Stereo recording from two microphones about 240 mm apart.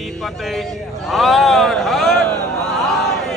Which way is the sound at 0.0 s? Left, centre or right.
Centre.